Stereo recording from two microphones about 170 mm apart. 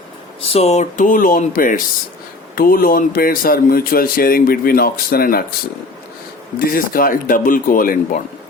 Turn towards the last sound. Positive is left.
turn(degrees=55)  # may be behind; listen again after turning